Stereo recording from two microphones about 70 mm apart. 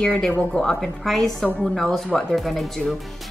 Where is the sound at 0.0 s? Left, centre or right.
Centre.